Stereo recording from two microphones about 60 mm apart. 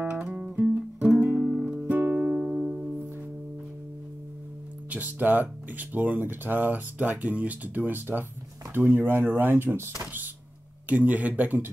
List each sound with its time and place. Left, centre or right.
0.1 s music: centre
1.2 s music: right
1.5 s music: centre
1.9 s music: right
2.4 s music: centre
4.8 s speech: right